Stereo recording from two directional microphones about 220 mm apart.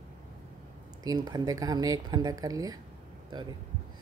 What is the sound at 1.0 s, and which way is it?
Speech, 15° right (ahead or behind).